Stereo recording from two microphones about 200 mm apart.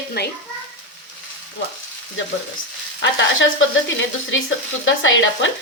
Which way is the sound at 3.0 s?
65° left (ahead or behind).